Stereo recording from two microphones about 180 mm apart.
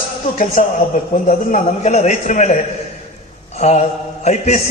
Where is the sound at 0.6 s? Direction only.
40° left (ahead or behind).